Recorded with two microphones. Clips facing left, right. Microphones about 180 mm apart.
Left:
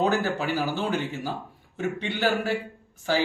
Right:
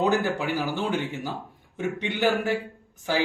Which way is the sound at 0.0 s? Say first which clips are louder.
Right 1 dB; 15° right (ahead or behind).